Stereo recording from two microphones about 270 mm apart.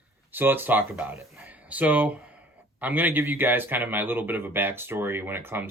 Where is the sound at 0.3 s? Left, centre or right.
Centre.